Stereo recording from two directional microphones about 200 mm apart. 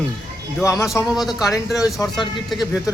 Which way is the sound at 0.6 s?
15° left (ahead or behind).